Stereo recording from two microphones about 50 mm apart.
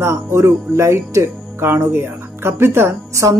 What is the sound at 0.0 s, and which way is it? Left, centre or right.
Speech, right.